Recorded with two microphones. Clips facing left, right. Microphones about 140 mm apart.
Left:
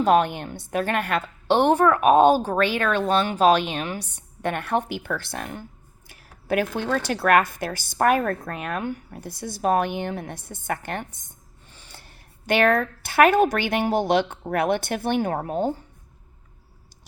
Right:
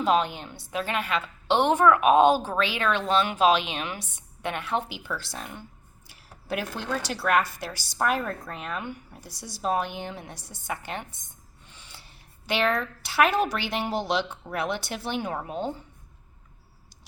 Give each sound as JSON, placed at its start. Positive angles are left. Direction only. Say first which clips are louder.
{"t": 0.0, "sound": "a woman's voice", "louder": "left 5 dB", "side_deg": 55}
{"t": 4.4, "sound": "a woman's voice", "louder": "left 4 dB", "side_deg": 50}
{"t": 11.7, "sound": "a woman's voice", "louder": "left 3 dB", "side_deg": 40}